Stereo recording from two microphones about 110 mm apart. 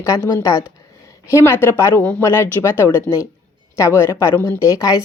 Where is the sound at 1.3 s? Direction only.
20° left (ahead or behind).